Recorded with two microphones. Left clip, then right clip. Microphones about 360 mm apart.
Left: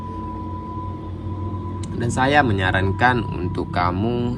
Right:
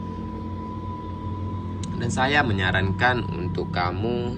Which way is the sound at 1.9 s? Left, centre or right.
Centre.